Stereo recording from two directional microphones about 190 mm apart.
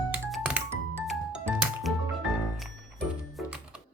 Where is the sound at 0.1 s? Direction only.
5° right (ahead or behind).